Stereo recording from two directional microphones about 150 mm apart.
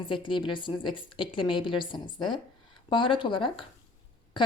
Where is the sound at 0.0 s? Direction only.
35° left (ahead or behind).